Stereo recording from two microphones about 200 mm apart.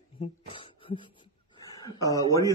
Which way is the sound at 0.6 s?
25° left (ahead or behind).